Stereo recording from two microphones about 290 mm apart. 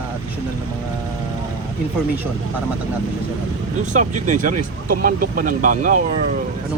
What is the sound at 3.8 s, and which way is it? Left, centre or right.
Speech, right.